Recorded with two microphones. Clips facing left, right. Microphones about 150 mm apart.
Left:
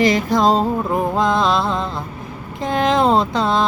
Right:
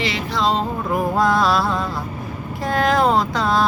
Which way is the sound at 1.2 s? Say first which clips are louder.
Right 1 dB; 20° left (ahead or behind).